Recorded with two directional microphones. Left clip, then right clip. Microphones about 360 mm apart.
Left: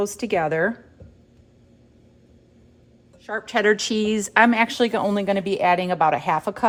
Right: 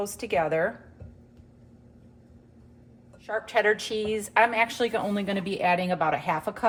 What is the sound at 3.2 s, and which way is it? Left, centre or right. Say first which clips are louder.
A woman's voice: left 4 dB; left.